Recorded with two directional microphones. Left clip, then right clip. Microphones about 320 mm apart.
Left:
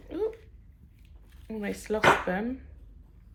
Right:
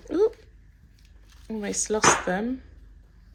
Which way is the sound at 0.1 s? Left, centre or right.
Centre.